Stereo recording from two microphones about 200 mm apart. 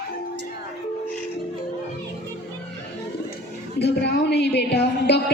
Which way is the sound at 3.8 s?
55° left (ahead or behind).